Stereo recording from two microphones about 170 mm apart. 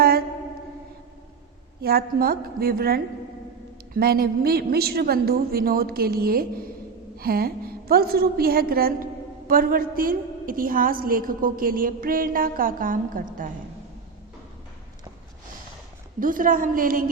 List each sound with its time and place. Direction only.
1.8 s a woman's voice: 65° right (ahead or behind)
16.2 s a woman's voice: 55° right (ahead or behind)